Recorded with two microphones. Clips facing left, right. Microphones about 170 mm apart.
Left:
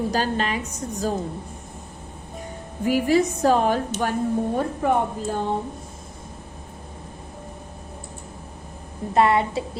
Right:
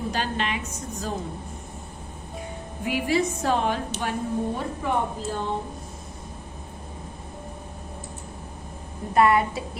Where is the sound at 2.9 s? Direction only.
40° left (ahead or behind).